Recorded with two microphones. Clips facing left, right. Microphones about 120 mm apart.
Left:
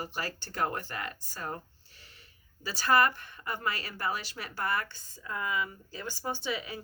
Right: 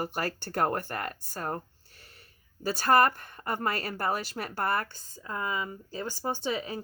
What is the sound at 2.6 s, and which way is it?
Speech, 50° right (ahead or behind).